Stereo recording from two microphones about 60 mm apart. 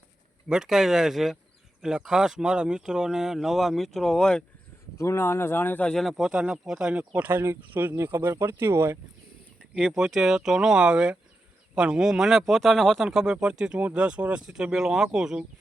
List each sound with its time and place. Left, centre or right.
0.4 s speech: centre
4.9 s speech: left
6.1 s speech: centre; by 9.0 s right
9.6 s a sound: centre
10.0 s speech: centre
12.5 s speech: centre
13.1 s speech: centre